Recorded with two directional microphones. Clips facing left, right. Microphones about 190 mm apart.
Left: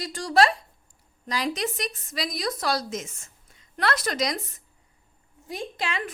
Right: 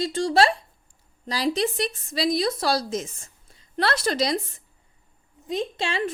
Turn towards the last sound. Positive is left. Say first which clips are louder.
# right 4 dB
turn(degrees=-30)  # may be behind; listen again after turning